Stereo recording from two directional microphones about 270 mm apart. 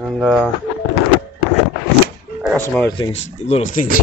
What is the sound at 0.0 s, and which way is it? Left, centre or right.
Speech, centre.